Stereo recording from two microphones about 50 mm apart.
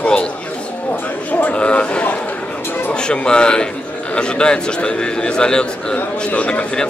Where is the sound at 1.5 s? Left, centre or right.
Left.